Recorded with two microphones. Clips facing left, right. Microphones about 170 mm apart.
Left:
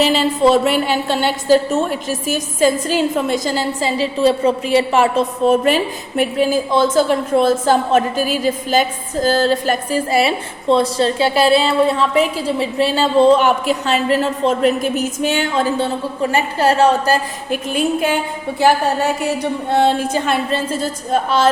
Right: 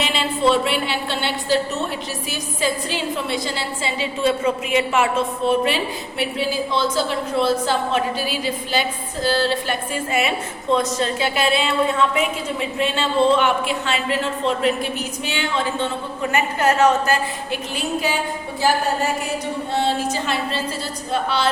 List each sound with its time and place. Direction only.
0.0 s a woman's voice: 40° left (ahead or behind)
17.5 s a woman's voice: 50° left (ahead or behind)
19.7 s a woman's voice: 55° left (ahead or behind)